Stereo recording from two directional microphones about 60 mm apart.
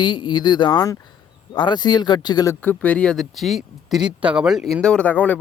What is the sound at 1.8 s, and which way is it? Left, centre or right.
Speech, left.